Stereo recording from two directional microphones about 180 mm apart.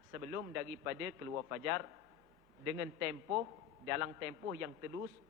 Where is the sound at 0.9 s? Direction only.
20° right (ahead or behind).